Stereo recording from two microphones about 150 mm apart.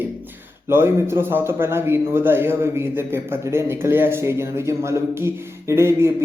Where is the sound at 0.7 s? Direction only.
15° right (ahead or behind).